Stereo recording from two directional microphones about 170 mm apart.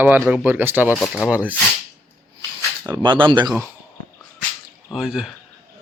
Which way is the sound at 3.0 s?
25° right (ahead or behind).